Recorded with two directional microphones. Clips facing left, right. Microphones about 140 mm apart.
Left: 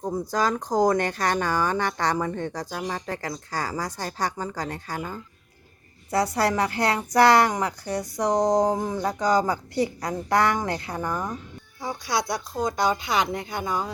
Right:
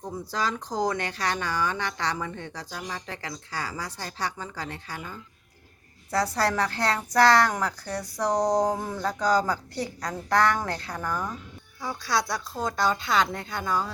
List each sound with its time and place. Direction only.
0.0 s speech: 45° left (ahead or behind)
6.1 s speech: 25° left (ahead or behind)
8.2 s a sound: centre (ahead or behind)
8.6 s speech: 15° left (ahead or behind)